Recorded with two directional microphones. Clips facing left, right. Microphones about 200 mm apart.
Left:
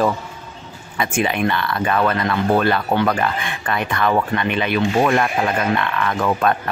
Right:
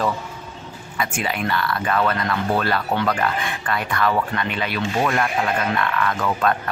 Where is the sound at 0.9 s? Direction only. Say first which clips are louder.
Left 5 dB; 25° left (ahead or behind).